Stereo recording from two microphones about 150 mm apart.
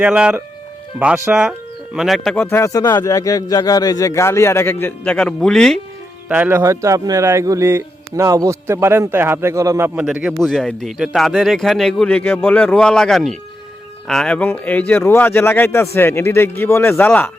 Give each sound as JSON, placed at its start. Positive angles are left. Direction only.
{"t": 0.0, "sound": "speech", "side_deg": -5}
{"t": 1.5, "sound": "speech", "side_deg": 0}
{"t": 2.3, "sound": "speech", "side_deg": 15}
{"t": 6.2, "sound": "speech", "side_deg": -10}